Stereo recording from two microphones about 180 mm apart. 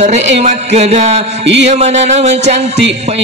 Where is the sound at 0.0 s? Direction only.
40° right (ahead or behind).